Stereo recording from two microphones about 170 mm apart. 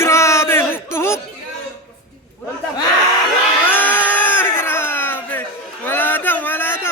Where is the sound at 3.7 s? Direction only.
10° left (ahead or behind).